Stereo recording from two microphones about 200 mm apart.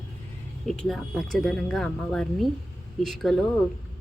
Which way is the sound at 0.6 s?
Centre (ahead or behind).